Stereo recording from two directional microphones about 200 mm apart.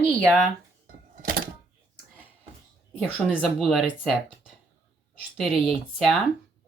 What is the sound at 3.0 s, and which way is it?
Speech, 5° right (ahead or behind).